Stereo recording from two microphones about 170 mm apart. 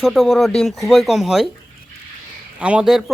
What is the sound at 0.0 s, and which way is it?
Speech, centre (ahead or behind).